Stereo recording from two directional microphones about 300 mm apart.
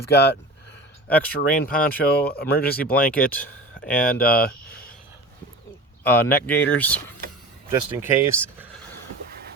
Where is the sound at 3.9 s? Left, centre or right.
Left.